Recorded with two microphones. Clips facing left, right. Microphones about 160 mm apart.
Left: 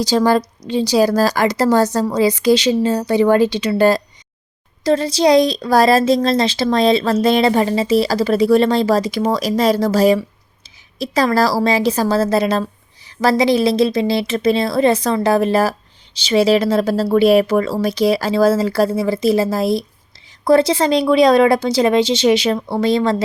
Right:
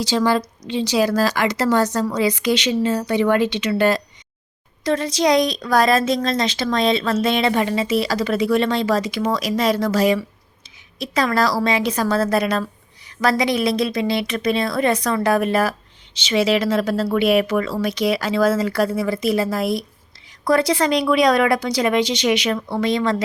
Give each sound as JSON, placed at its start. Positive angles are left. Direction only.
{"t": 0.0, "sound": "speech", "side_deg": 40}